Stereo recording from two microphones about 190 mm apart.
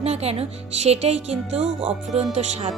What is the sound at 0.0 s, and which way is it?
A woman's voice, 35° right (ahead or behind).